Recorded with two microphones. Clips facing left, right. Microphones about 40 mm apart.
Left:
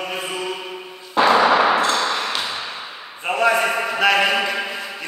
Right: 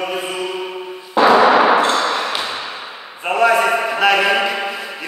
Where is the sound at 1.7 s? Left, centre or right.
Right.